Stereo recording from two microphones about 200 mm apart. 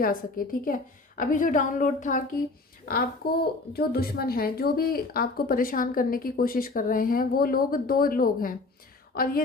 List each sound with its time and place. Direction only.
0.0 s a woman's voice: 45° left (ahead or behind)